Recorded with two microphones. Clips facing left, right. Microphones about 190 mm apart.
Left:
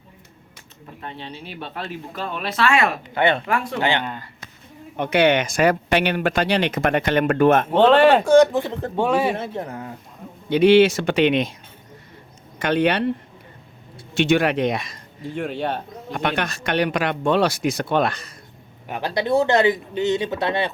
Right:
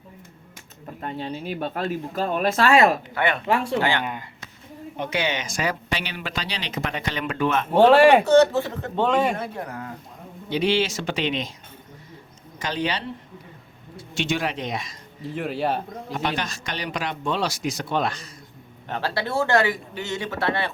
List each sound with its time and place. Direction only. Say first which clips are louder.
1.0 s speech: right 5 dB; 45° right (ahead or behind)
3.2 s speech: left 10 dB; 30° left (ahead or behind)
3.4 s speech: right 1 dB; 25° right (ahead or behind)
4.0 s speech: even; 15° right (ahead or behind)
4.9 s speech: left 9 dB; 60° left (ahead or behind)
7.7 s speech: right 4 dB; 10° right (ahead or behind)
8.3 s speech: left 2 dB; 15° left (ahead or behind)
9.3 s speech: left 3 dB; 25° left (ahead or behind)
10.5 s speech: left 9 dB; 60° left (ahead or behind)
12.5 s speech: left 8 dB; 60° left (ahead or behind)
15.2 s speech: left 1 dB; centre (ahead or behind)
16.1 s speech: left 4 dB; 60° left (ahead or behind)
18.9 s speech: left 5 dB; 15° left (ahead or behind)